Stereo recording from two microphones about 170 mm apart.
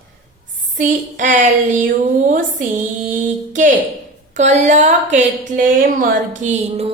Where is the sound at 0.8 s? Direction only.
45° right (ahead or behind).